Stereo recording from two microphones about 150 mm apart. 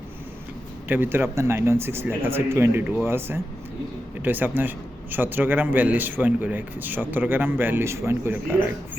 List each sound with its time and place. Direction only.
0.9 s a man's voice: 15° right (ahead or behind)